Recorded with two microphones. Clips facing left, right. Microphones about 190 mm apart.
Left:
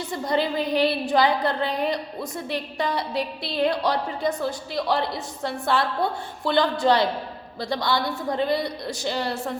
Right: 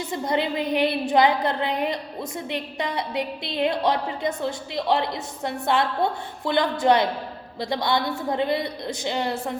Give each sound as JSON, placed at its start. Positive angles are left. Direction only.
{"t": 0.1, "sound": "a woman's voice", "side_deg": -20}